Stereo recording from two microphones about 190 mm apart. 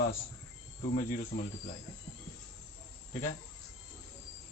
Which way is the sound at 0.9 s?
45° left (ahead or behind).